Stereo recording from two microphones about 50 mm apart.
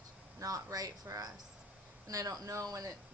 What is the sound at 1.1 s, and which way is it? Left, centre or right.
Speech, right.